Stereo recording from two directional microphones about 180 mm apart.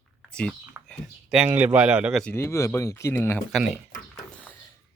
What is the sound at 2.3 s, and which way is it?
Speech, 15° left (ahead or behind).